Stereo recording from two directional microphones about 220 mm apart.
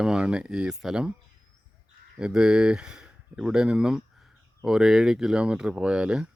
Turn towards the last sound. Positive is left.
turn(degrees=-5)  # may be behind; listen again after turning